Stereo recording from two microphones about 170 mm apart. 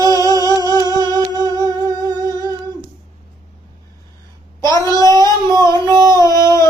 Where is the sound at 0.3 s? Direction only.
20° right (ahead or behind).